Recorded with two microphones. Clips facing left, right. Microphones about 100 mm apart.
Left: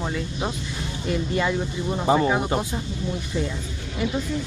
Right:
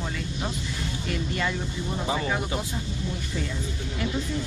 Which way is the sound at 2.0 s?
35° left (ahead or behind).